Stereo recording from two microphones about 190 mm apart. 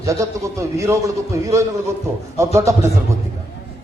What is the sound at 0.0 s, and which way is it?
A man's voice, 15° right (ahead or behind).